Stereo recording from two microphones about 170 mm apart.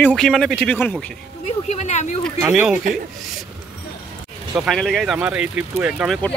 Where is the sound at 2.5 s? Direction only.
5° right (ahead or behind).